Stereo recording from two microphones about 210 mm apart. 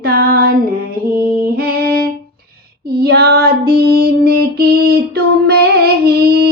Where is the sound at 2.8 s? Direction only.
50° right (ahead or behind).